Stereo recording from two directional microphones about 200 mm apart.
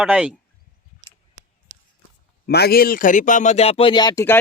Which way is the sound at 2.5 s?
50° left (ahead or behind).